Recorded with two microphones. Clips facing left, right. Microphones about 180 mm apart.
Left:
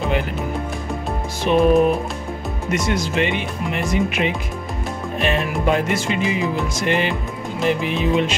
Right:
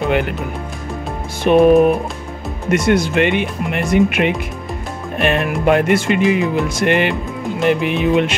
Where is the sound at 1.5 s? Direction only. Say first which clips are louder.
Right 5 dB; 55° right (ahead or behind).